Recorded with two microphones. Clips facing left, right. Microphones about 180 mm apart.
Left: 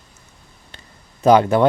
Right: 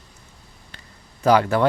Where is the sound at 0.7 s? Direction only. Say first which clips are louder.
Left 2 dB; 25° left (ahead or behind).